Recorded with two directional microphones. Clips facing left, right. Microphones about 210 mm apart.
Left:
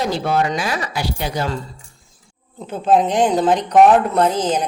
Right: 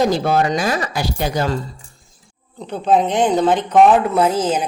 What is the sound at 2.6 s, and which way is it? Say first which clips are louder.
Speech: even; 5° left (ahead or behind).